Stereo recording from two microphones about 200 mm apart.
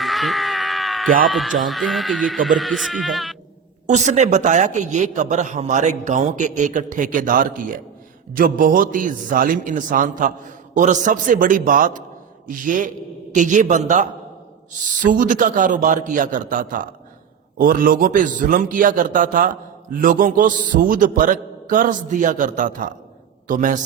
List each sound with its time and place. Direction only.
0.0 s a sound: centre (ahead or behind)
1.2 s speech: centre (ahead or behind)
3.8 s a man's voice: 35° right (ahead or behind)